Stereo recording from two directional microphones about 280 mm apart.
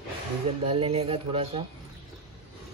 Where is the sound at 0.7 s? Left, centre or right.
Centre.